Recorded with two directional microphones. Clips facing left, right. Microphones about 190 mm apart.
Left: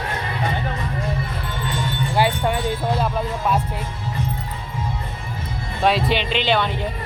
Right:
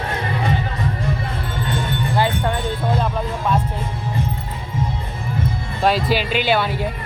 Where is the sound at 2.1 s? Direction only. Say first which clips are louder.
Left 1 dB; 10° left (ahead or behind).